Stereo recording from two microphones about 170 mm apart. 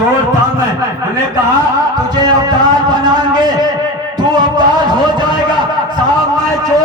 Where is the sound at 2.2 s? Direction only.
25° right (ahead or behind).